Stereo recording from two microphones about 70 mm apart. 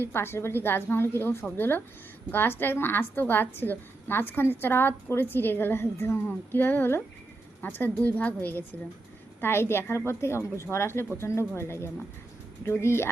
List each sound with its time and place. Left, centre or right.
0.0 s a woman's voice: left
9.4 s a woman's voice: left